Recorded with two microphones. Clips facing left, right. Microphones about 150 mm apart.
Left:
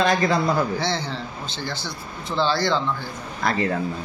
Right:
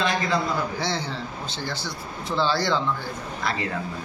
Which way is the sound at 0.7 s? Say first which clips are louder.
Left 2 dB; 10° right (ahead or behind).